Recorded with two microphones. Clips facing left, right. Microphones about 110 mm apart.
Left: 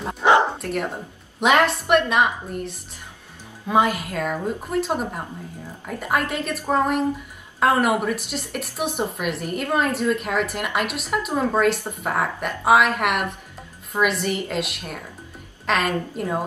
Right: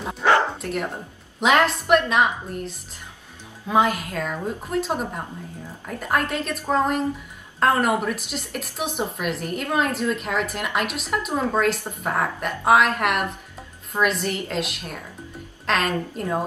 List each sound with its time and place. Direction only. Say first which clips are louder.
0.2 s bow-wow: left 2 dB; 20° left (ahead or behind)
0.6 s a woman's voice: left 1 dB; centre (ahead or behind)
15.6 s a woman's voice: left 1 dB; centre (ahead or behind)